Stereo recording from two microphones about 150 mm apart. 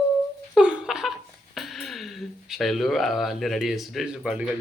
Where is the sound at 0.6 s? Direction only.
5° right (ahead or behind).